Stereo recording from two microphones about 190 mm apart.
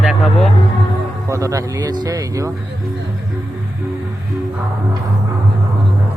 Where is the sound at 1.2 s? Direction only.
15° right (ahead or behind).